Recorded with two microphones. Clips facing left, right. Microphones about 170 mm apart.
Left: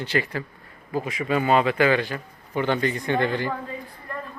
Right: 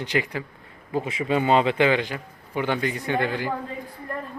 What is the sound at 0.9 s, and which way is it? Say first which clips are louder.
A man's voice: right 1 dB; 25° right (ahead or behind).